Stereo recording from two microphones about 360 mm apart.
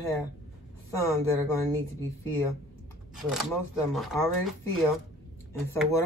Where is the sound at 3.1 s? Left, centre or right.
Centre.